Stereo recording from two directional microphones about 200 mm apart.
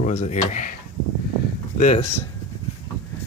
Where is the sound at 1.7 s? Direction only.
35° left (ahead or behind).